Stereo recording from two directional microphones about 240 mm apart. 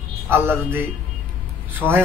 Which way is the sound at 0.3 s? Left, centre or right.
Centre.